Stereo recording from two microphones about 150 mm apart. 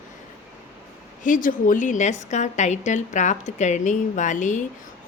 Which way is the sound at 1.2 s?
60° left (ahead or behind).